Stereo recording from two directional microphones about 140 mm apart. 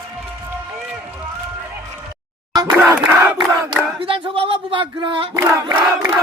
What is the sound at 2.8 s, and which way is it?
Crowd, 15° right (ahead or behind).